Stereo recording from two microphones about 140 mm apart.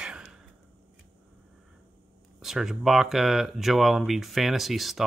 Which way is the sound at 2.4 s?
5° right (ahead or behind).